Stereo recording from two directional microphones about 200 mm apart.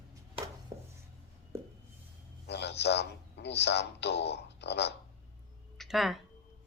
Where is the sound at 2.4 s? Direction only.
55° left (ahead or behind).